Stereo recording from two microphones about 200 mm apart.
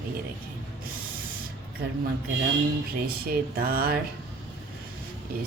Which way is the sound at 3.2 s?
50° right (ahead or behind).